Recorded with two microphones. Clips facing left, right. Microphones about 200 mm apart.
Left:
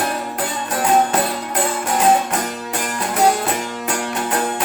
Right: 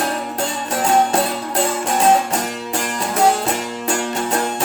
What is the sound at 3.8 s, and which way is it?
Music, 25° right (ahead or behind).